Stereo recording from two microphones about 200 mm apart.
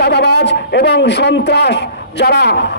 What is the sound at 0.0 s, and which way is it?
A man's voice, 55° left (ahead or behind).